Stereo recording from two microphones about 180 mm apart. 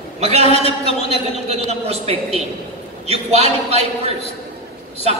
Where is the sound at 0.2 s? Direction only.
35° right (ahead or behind).